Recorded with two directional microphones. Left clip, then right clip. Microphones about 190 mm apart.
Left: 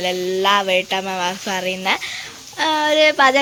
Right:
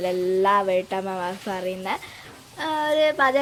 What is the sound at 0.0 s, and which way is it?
A woman's voice, 5° right (ahead or behind).